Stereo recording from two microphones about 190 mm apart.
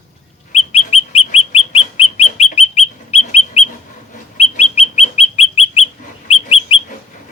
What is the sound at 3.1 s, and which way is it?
Bird, 30° left (ahead or behind).